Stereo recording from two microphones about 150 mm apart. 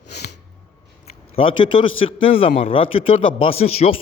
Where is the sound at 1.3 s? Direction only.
35° left (ahead or behind).